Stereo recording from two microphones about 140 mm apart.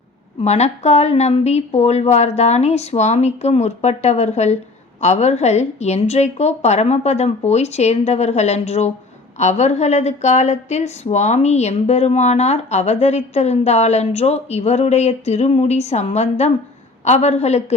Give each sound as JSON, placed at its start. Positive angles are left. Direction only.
{"t": 0.4, "sound": "a woman's voice", "side_deg": 50}